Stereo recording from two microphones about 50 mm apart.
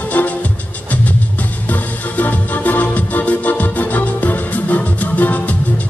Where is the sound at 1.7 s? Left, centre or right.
Left.